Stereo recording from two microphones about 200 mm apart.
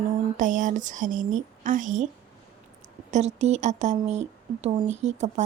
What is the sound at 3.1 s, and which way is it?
A woman's voice, 35° right (ahead or behind).